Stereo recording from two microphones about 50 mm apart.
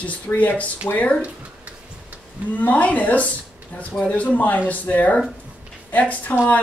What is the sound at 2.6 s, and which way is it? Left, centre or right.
Speech, left.